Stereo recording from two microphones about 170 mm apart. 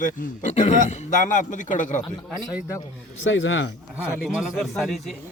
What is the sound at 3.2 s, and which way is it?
Speech, 90° left.